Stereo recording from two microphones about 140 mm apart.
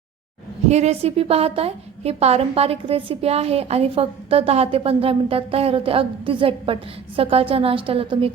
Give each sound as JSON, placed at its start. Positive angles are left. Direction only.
{"t": 0.7, "sound": "a woman's voice", "side_deg": -50}